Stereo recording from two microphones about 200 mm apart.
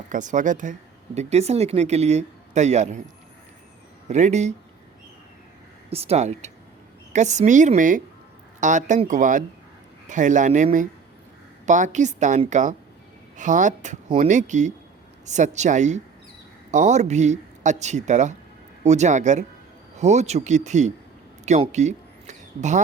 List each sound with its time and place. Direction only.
0.1 s speech: 40° right (ahead or behind)
4.1 s speech: 35° right (ahead or behind)
5.9 s speech: 30° right (ahead or behind)
21.4 s a sound: 35° right (ahead or behind)